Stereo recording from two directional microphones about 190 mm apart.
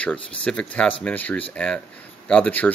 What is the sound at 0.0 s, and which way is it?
Speech, 5° left (ahead or behind).